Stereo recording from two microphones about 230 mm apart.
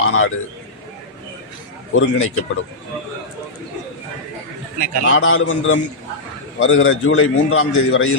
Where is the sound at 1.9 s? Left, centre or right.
Left.